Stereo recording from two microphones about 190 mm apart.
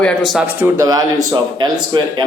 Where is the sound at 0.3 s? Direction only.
5° right (ahead or behind).